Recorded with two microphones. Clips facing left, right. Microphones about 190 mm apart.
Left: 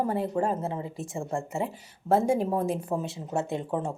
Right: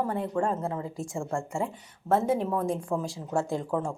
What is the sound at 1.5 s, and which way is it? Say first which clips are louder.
Speech: even; 5° left (ahead or behind).